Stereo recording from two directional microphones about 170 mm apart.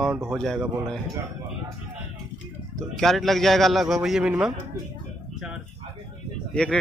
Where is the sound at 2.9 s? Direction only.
Centre (ahead or behind).